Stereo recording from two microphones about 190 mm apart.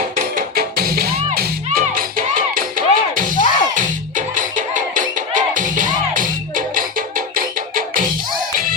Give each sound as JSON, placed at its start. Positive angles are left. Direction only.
{"t": 0.3, "sound": "music", "side_deg": -50}